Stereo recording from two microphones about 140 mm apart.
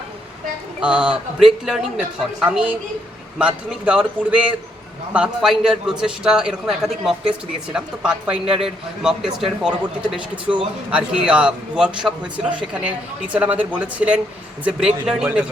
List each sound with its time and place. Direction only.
0.8 s a woman's voice: 5° right (ahead or behind)
10.2 s speech: 35° right (ahead or behind)
10.9 s a woman's voice: 5° right (ahead or behind)